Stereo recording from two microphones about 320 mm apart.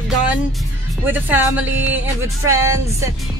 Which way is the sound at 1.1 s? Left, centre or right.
Centre.